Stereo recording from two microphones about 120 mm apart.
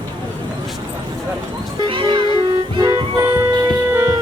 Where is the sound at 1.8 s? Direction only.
45° right (ahead or behind).